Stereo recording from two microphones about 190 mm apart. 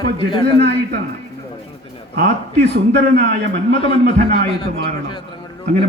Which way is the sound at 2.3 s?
60° right (ahead or behind).